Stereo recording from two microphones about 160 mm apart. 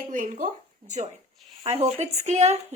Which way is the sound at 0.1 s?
55° right (ahead or behind).